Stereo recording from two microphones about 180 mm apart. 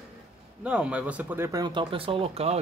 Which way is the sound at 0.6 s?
5° right (ahead or behind).